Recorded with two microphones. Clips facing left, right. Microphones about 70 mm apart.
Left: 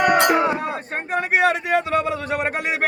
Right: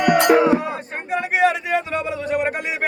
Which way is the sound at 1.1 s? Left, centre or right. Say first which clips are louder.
Right 1 dB; left.